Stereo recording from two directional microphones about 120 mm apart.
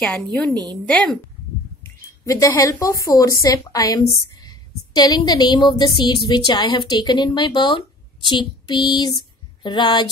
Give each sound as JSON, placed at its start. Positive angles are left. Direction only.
{"t": 0.0, "sound": "a woman's voice", "side_deg": 10}
{"t": 2.2, "sound": "a woman's voice", "side_deg": 25}